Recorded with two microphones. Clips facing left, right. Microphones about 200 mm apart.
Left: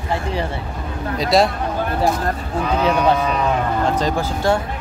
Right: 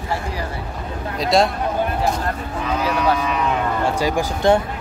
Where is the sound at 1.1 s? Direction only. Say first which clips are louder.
Left 1 dB; centre (ahead or behind).